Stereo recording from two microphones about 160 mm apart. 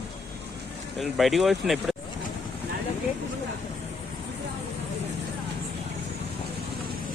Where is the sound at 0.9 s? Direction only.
Centre (ahead or behind).